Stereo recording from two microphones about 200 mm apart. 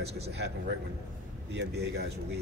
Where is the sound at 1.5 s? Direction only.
60° right (ahead or behind).